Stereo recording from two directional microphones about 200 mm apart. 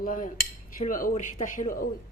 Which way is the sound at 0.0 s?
45° left (ahead or behind).